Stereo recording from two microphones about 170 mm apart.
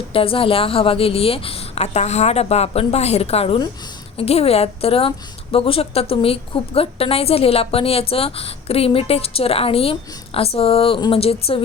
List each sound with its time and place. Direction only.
0.1 s a woman's voice: 30° left (ahead or behind)